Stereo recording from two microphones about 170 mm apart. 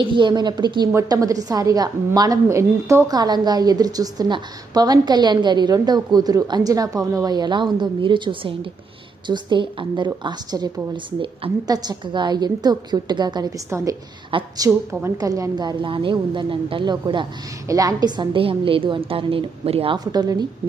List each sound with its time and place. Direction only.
0.0 s a woman's voice: 30° right (ahead or behind)
14.3 s a woman's voice: 30° right (ahead or behind)